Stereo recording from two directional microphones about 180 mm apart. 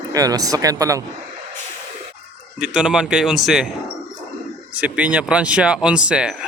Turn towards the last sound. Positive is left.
turn(degrees=-5)  # may be behind; listen again after turning